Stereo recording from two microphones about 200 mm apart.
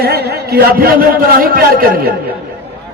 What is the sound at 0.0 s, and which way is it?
A man's voice, 50° right (ahead or behind).